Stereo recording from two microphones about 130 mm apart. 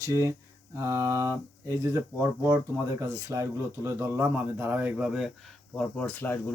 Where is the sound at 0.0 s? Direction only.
25° right (ahead or behind); by 5.3 s 5° right (ahead or behind).